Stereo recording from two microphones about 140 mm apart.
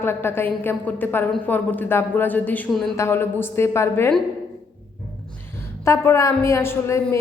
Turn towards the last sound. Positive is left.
turn(degrees=20)  # may be behind; listen again after turning